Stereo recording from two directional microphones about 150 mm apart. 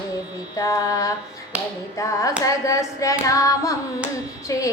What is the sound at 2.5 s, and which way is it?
Hands, 20° left (ahead or behind).